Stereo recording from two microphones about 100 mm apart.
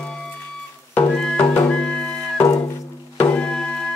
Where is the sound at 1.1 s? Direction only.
10° left (ahead or behind).